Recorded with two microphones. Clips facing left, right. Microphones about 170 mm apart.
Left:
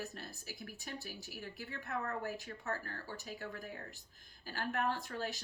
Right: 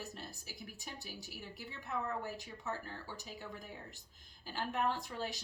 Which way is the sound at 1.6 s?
55° left (ahead or behind).